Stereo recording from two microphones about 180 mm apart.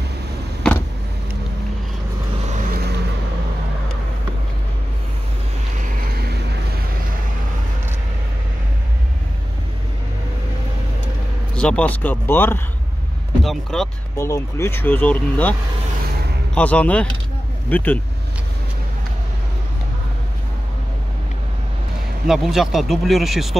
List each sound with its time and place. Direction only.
2.5 s vehicle: 50° right (ahead or behind)
6.1 s vehicle: 65° right (ahead or behind)
11.5 s speech: 5° left (ahead or behind)
13.4 s speech: centre (ahead or behind)
14.1 s speech: 15° left (ahead or behind)
16.5 s speech: 5° left (ahead or behind)
22.3 s speech: centre (ahead or behind)